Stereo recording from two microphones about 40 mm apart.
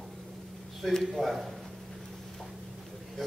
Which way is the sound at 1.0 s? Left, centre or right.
Centre.